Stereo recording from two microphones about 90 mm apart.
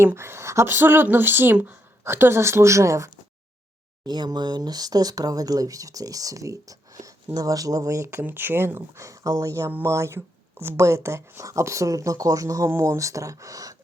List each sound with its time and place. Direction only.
0.0 s speech: 30° right (ahead or behind)
4.0 s speech: 50° right (ahead or behind); by 8.2 s 35° right (ahead or behind)
8.2 s speech: 20° right (ahead or behind); by 13.7 s 40° right (ahead or behind)